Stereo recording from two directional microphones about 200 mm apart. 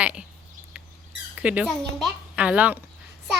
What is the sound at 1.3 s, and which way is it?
A woman's voice, 5° right (ahead or behind).